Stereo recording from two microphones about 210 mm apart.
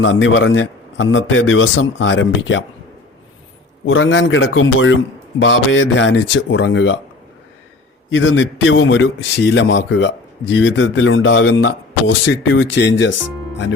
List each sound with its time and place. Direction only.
0.0 s a man's voice: 65° left (ahead or behind)
3.8 s a man's voice: 65° left (ahead or behind)
8.1 s a man's voice: 65° left (ahead or behind)